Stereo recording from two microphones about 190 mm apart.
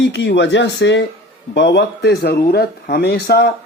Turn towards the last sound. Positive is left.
turn(degrees=60)  # may be behind; listen again after turning